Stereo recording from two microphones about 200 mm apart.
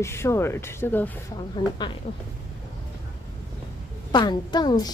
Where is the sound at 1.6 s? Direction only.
20° left (ahead or behind).